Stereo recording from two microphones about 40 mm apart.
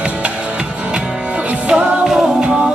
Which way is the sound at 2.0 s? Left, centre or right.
Centre.